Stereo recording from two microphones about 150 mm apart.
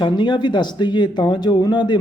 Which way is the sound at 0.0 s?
30° left (ahead or behind).